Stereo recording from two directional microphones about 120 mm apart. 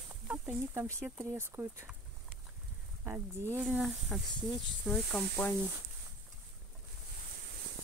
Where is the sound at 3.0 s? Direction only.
20° right (ahead or behind).